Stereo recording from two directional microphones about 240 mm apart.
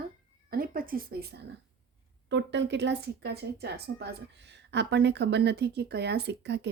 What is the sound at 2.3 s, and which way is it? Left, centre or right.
Speech, right.